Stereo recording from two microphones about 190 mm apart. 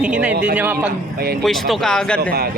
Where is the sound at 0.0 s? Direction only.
5° right (ahead or behind).